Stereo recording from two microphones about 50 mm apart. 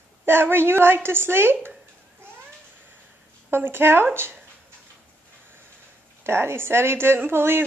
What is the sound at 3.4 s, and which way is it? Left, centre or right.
Speech, right.